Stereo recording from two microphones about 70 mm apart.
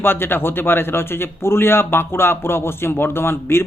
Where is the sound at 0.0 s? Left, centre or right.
Left.